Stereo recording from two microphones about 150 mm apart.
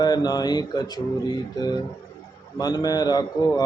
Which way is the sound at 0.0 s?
25° left (ahead or behind).